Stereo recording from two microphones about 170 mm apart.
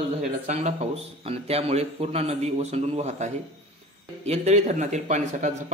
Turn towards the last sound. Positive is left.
turn(degrees=-45)  # may be behind; listen again after turning